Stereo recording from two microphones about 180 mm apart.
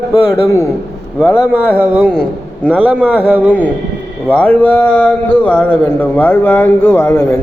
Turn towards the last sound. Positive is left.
turn(degrees=15)  # may be behind; listen again after turning